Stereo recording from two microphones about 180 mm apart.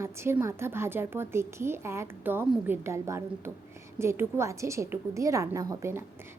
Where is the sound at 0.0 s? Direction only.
15° right (ahead or behind).